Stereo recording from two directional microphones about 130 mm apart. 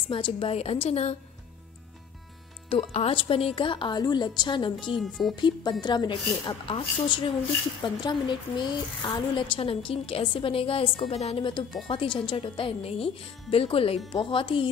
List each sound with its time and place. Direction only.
0.1 s a woman's voice: 45° left (ahead or behind)
2.7 s a woman's voice: 55° left (ahead or behind); by 4.7 s 40° left (ahead or behind)
4.9 s speech: centre (ahead or behind)
5.3 s a woman's voice: 35° left (ahead or behind)